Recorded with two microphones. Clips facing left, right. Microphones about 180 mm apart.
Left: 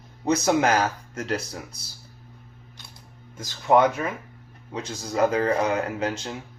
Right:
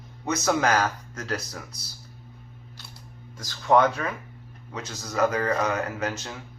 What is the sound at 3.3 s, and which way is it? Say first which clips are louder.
Speech: left 1 dB; 20° left (ahead or behind).